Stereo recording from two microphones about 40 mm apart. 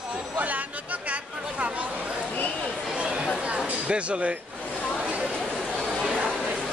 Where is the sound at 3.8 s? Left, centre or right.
Right.